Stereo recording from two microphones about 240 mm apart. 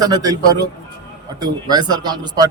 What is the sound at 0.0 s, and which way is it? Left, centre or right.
A man's voice, centre.